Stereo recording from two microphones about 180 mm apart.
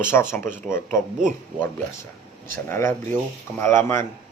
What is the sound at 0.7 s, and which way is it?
Speech, 45° right (ahead or behind).